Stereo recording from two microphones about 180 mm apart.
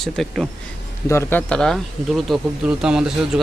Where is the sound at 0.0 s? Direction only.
Centre (ahead or behind).